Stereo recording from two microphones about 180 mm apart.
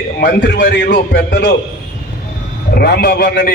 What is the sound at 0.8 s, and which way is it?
Music, 70° left (ahead or behind).